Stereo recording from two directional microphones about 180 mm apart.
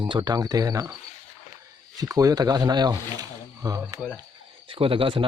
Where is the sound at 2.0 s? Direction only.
20° right (ahead or behind).